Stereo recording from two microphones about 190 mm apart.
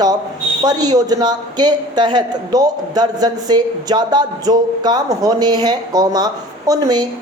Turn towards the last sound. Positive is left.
turn(degrees=-20)  # may be behind; listen again after turning